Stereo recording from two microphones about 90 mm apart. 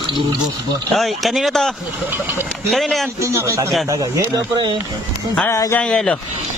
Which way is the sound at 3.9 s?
45° right (ahead or behind).